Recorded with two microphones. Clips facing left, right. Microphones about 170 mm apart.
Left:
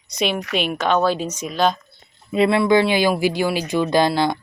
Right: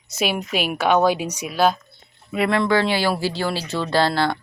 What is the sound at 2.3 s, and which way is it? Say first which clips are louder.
Speech: left 4 dB; 20° left (ahead or behind).